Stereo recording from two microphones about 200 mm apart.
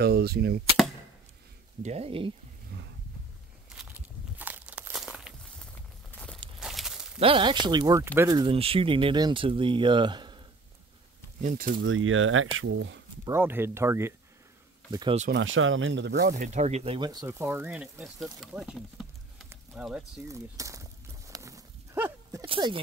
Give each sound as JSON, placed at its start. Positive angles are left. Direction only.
{"t": 0.0, "sound": "cap gun", "side_deg": -50}
{"t": 1.8, "sound": "speech", "side_deg": -30}
{"t": 4.4, "sound": "crumpling", "side_deg": -10}
{"t": 6.1, "sound": "a sound", "side_deg": 5}
{"t": 7.2, "sound": "speech", "side_deg": -25}
{"t": 11.4, "sound": "cap gun", "side_deg": -45}
{"t": 11.8, "sound": "speech", "side_deg": -85}
{"t": 13.2, "sound": "speech", "side_deg": -10}
{"t": 15.3, "sound": "speech", "side_deg": -80}
{"t": 20.2, "sound": "a sound", "side_deg": -15}
{"t": 22.5, "sound": "speech", "side_deg": -25}